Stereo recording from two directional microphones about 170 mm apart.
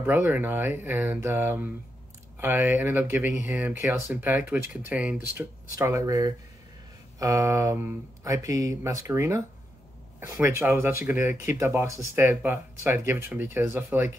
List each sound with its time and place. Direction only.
0.0 s speech: 10° right (ahead or behind)